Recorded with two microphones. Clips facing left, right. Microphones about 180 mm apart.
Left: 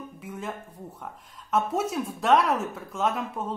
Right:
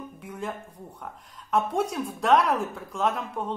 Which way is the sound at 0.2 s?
Centre (ahead or behind).